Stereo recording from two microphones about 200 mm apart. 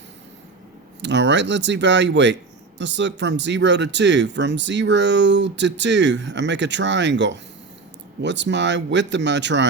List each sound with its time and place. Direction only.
1.0 s speech: 60° right (ahead or behind)